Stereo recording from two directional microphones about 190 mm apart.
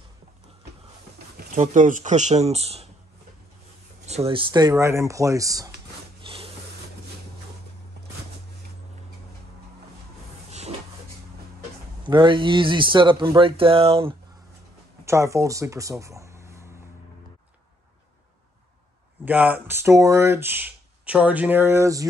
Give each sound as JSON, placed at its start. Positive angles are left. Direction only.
{"t": 1.3, "sound": "speech", "side_deg": -45}
{"t": 4.0, "sound": "speech", "side_deg": -35}
{"t": 6.2, "sound": "a sound", "side_deg": -30}
{"t": 12.1, "sound": "speech", "side_deg": -25}
{"t": 15.0, "sound": "speech", "side_deg": -15}
{"t": 19.2, "sound": "speech", "side_deg": -10}